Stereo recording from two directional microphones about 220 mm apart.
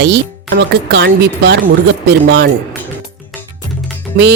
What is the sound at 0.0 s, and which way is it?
Speech, 50° right (ahead or behind).